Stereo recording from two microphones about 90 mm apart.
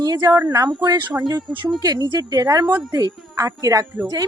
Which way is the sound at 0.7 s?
55° right (ahead or behind).